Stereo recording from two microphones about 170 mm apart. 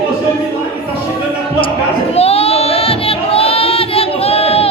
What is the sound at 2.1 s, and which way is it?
Singing, 35° left (ahead or behind).